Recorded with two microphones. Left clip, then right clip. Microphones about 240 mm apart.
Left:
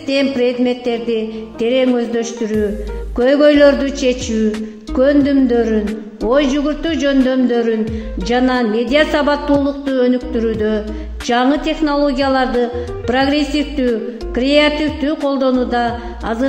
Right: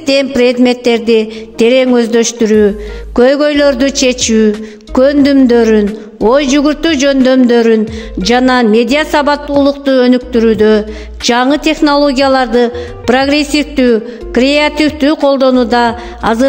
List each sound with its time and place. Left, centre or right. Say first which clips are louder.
0.0 s speech: right 6 dB; right